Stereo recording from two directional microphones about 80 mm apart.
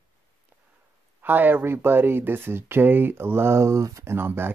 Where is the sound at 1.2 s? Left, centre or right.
Right.